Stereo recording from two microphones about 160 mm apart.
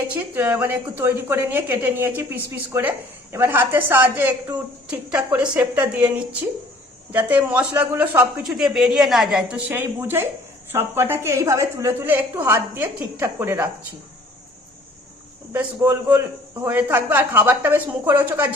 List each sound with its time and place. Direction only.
0.1 s speech: 10° right (ahead or behind)
15.5 s speech: 15° right (ahead or behind)